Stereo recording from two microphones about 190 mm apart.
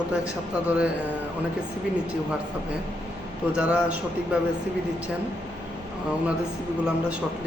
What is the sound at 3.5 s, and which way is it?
Speech, 5° right (ahead or behind).